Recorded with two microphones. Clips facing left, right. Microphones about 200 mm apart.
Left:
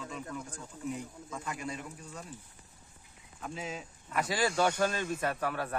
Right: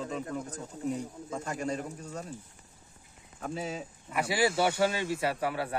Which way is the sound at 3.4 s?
40° right (ahead or behind).